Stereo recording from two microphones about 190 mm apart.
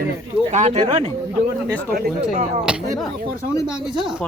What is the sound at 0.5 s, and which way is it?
Speech, 35° right (ahead or behind).